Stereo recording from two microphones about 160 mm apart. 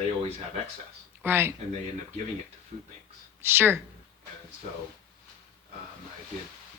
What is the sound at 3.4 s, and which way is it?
Speech, 15° right (ahead or behind).